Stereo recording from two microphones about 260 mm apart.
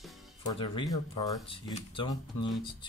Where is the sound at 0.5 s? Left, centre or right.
Centre.